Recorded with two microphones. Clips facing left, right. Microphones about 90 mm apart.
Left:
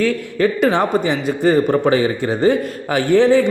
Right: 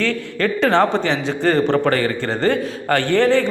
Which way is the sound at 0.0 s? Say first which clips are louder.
Left 4 dB; 10° left (ahead or behind).